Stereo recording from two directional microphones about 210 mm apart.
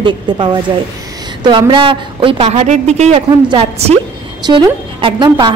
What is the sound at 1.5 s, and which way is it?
A woman's voice, 25° right (ahead or behind).